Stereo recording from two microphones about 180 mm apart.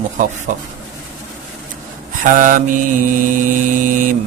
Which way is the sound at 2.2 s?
50° right (ahead or behind).